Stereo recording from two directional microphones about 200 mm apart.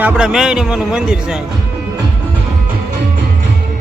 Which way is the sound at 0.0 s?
5° right (ahead or behind).